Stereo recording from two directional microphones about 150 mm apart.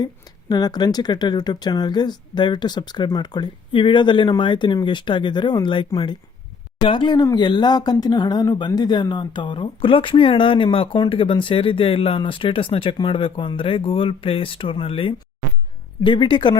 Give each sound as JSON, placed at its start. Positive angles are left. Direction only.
{"t": 0.0, "sound": "speech", "side_deg": 25}